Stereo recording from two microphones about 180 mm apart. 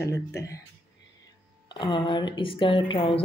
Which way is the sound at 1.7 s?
25° left (ahead or behind).